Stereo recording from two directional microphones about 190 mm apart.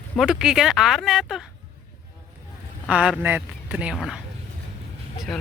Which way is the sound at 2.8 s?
5° right (ahead or behind).